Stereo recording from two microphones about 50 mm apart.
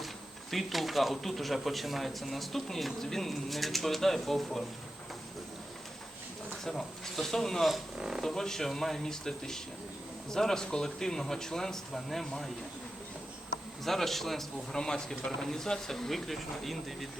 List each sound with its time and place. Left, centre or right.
0.5 s speech: centre
6.7 s speech: centre
7.9 s speech: centre
8.2 s a man's voice: centre
13.8 s a man's voice: centre